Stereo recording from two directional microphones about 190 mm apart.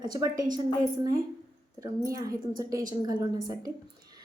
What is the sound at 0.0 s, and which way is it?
Speech, 20° right (ahead or behind).